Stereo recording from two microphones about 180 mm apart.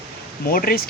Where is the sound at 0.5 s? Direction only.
55° left (ahead or behind).